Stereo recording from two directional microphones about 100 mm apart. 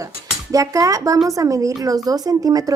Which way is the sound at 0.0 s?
35° right (ahead or behind).